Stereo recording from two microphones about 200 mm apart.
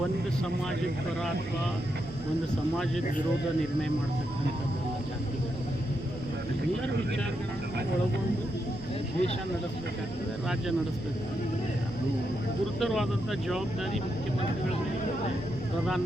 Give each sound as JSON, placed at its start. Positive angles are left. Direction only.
{"t": 12.8, "sound": "speech", "side_deg": 0}